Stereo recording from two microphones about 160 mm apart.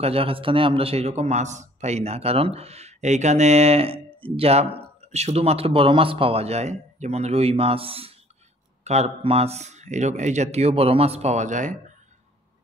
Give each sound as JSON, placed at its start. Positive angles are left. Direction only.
{"t": 0.0, "sound": "a man's voice", "side_deg": -35}